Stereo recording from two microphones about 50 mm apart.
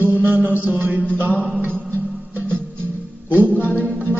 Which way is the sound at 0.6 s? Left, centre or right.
Right.